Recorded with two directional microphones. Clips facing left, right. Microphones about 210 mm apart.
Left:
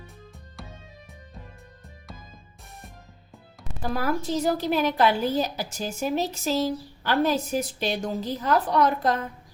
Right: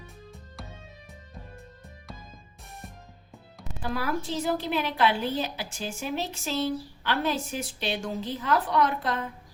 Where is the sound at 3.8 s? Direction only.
40° left (ahead or behind).